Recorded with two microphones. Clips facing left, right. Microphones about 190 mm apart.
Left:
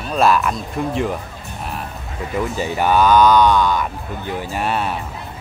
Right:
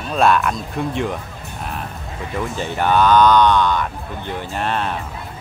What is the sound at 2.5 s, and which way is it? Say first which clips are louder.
Speech: even; 10° left (ahead or behind).